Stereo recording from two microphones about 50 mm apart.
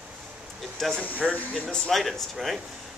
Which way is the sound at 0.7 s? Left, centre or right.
Centre.